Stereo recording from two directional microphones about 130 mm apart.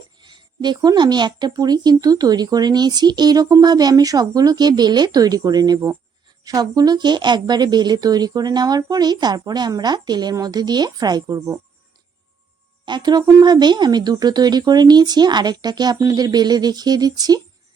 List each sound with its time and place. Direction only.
0.2 s speech: 35° right (ahead or behind)
12.8 s speech: 35° right (ahead or behind)